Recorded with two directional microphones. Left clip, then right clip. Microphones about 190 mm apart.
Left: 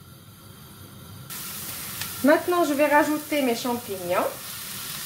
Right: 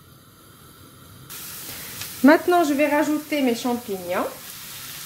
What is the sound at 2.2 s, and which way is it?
Speech, 45° right (ahead or behind).